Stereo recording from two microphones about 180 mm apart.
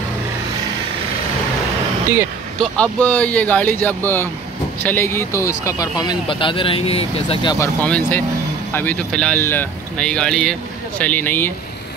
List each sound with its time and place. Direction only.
2.6 s speech: 5° left (ahead or behind); by 7.5 s 30° left (ahead or behind)
7.5 s speech: 10° left (ahead or behind)